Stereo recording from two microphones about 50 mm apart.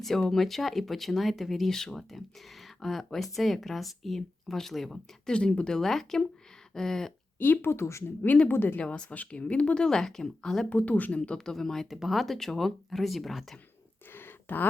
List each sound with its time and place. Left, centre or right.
0.0 s speech: centre
5.3 s speech: centre
7.3 s speech: left
7.7 s speech: left
8.0 s speech: left
8.8 s speech: left
10.7 s speech: left
11.3 s speech: centre
11.9 s speech: centre
14.1 s a sound: left